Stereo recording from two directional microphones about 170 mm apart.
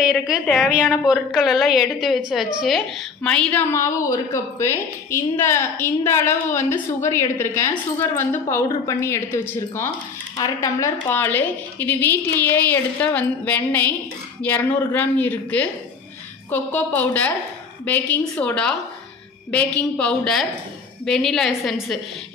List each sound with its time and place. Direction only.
0.0 s a woman's voice: centre (ahead or behind)
19.8 s a woman's voice: 5° left (ahead or behind)